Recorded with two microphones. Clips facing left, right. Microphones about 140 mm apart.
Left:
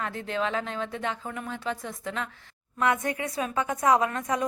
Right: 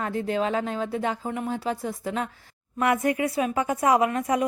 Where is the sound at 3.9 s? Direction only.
20° right (ahead or behind).